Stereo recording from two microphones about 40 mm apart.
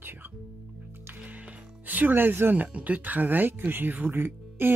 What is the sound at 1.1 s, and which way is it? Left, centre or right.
Music, right.